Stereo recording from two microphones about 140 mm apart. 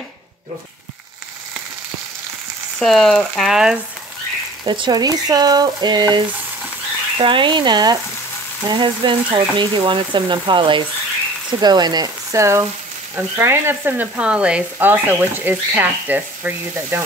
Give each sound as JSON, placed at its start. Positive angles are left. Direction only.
{"t": 2.8, "sound": "speech", "side_deg": 0}
{"t": 4.6, "sound": "frying", "side_deg": -35}